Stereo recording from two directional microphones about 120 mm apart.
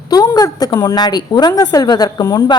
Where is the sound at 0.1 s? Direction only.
30° left (ahead or behind).